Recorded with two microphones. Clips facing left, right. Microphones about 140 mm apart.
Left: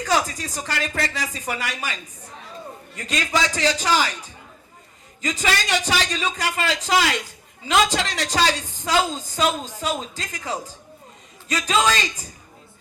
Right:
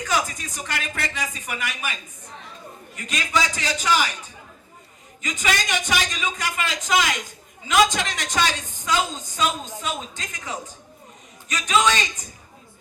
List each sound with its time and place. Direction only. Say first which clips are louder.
0.0 s a woman's voice: left 3 dB; 35° left (ahead or behind)
5.2 s a woman's voice: left 2 dB; 35° left (ahead or behind)